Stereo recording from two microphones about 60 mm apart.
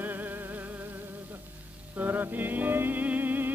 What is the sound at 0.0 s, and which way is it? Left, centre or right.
Music, right.